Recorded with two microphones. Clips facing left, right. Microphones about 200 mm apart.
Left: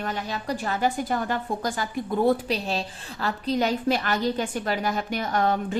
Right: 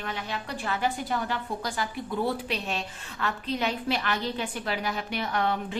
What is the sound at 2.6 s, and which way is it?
A woman's voice, 35° left (ahead or behind).